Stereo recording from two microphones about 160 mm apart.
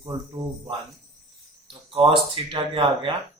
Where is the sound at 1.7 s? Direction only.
35° right (ahead or behind).